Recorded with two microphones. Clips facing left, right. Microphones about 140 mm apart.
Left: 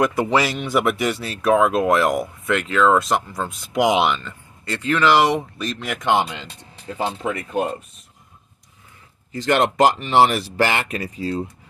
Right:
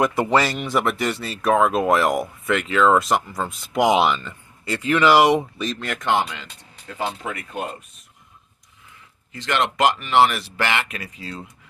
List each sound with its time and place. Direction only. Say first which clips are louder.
0.0 s speech: even; centre (ahead or behind)
5.6 s speech: right 1 dB; centre (ahead or behind)
5.9 s speech: left 3 dB; 15° left (ahead or behind)
9.3 s speech: left 5 dB; 40° left (ahead or behind)